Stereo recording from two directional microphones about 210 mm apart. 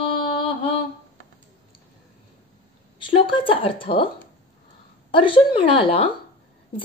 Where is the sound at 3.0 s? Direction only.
25° left (ahead or behind).